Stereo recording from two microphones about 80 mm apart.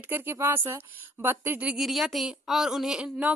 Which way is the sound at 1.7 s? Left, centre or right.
Centre.